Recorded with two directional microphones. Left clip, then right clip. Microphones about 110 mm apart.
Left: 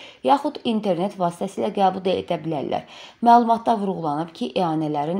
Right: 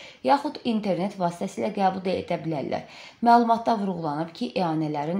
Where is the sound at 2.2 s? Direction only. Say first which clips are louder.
Left 3 dB; 15° left (ahead or behind).